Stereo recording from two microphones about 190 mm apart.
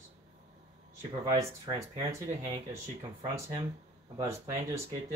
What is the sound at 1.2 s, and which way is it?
Speech, 20° right (ahead or behind).